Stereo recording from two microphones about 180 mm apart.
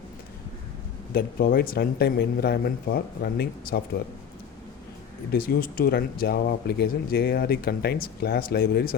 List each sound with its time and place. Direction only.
1.1 s speech: 55° left (ahead or behind)
5.3 s speech: 55° left (ahead or behind)